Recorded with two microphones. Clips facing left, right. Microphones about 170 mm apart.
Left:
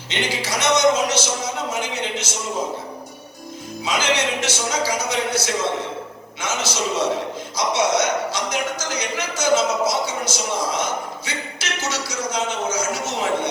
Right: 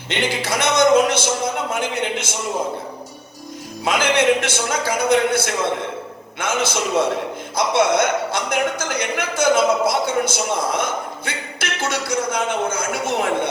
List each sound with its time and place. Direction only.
0.3 s speech: 55° right (ahead or behind)
3.8 s speech: 55° right (ahead or behind)